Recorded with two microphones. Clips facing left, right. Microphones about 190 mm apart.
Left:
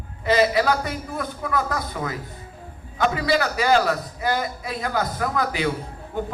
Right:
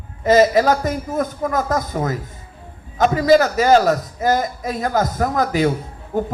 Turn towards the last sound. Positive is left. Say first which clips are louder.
# right 6 dB
turn(degrees=-45)  # may be behind; listen again after turning